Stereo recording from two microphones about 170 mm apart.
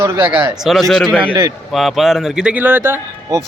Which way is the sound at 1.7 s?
Centre (ahead or behind).